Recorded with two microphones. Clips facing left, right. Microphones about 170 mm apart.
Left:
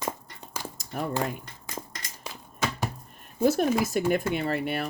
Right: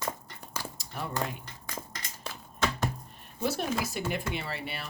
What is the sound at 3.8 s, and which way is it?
Speech, 50° left (ahead or behind).